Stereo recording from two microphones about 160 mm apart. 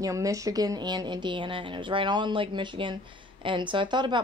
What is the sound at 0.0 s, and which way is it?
A woman's voice, 20° right (ahead or behind).